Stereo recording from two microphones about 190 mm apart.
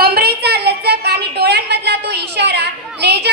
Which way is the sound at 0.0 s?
55° right (ahead or behind).